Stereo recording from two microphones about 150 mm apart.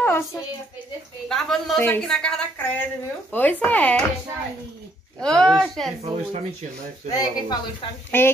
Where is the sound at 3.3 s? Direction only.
10° left (ahead or behind).